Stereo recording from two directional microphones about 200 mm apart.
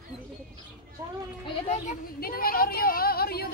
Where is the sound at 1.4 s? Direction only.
30° left (ahead or behind); by 3.5 s 50° left (ahead or behind).